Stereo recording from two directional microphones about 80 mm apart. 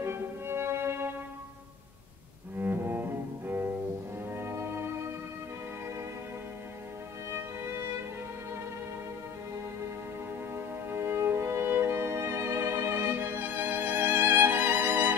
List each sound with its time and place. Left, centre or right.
0.0 s music: right
2.6 s double bass: right
4.3 s music: right
7.2 s music: right
10.5 s music: right